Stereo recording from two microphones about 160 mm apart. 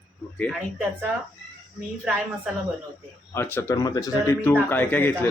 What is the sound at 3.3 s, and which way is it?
Speech, 15° left (ahead or behind).